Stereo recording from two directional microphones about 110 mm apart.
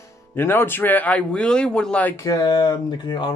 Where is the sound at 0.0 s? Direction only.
20° left (ahead or behind).